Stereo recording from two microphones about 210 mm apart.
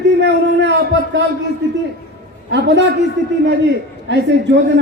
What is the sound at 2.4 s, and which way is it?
Speech, 55° right (ahead or behind).